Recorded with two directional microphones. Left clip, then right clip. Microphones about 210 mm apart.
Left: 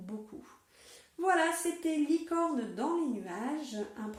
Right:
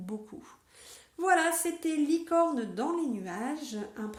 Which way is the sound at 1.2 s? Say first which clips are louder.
Right 3 dB; 45° right (ahead or behind).